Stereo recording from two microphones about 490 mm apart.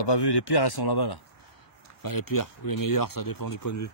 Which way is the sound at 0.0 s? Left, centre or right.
Left.